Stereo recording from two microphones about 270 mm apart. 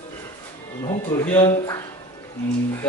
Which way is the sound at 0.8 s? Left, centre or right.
Centre.